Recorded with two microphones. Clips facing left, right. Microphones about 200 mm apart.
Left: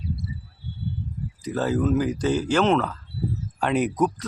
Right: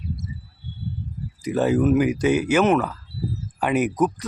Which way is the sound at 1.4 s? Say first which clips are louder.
Right 4 dB; 15° right (ahead or behind).